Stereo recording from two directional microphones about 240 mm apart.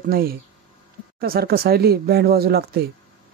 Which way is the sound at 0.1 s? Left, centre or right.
Right.